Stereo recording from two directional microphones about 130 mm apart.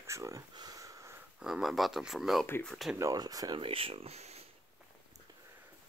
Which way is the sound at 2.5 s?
15° left (ahead or behind).